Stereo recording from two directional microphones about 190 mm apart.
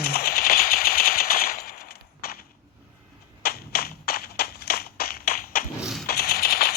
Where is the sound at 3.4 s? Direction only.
55° left (ahead or behind).